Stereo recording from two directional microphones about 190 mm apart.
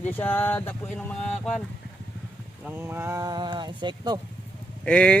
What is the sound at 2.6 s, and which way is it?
Speech, 10° right (ahead or behind).